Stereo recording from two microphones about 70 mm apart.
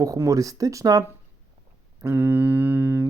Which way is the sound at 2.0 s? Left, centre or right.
Right.